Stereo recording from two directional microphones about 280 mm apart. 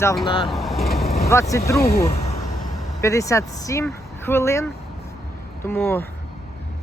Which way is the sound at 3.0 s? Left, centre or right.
Centre.